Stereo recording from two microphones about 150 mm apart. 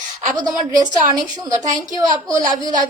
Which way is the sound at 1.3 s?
30° right (ahead or behind).